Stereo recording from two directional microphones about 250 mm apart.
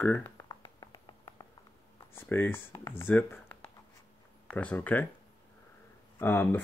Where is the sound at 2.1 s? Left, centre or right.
Centre.